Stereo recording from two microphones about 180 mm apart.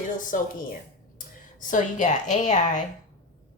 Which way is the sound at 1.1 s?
45° left (ahead or behind).